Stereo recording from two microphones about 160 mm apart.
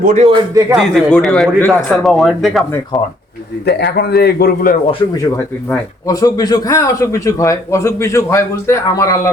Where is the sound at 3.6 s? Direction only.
90° left; by 4.8 s 65° left (ahead or behind).